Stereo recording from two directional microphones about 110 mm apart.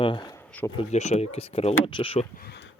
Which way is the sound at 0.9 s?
85° left.